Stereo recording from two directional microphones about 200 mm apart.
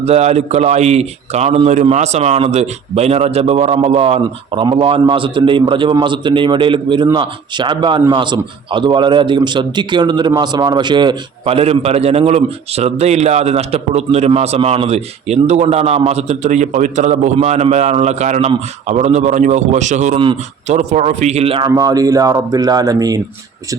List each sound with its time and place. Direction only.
0.0 s a man's voice: 30° right (ahead or behind)
21.7 s speech: 20° right (ahead or behind)